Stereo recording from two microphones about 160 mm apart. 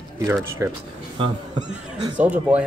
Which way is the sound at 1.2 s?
35° right (ahead or behind).